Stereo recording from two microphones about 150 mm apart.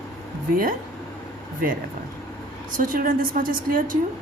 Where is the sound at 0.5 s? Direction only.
70° right (ahead or behind).